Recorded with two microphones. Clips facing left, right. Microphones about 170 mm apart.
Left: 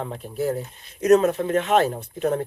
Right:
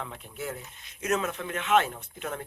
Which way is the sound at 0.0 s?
35° left (ahead or behind).